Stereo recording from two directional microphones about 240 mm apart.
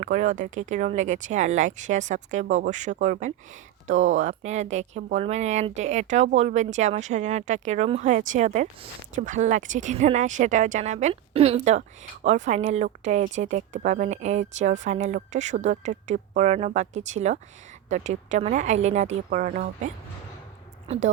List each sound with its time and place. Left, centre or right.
0.0 s a woman's voice: right